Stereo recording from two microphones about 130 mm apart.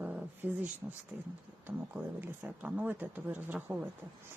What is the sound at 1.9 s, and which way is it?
Speech, 10° right (ahead or behind).